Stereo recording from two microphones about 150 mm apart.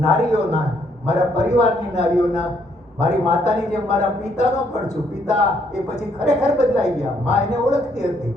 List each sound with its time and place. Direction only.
0.0 s speech: 50° left (ahead or behind)
6.2 s speech: 50° left (ahead or behind)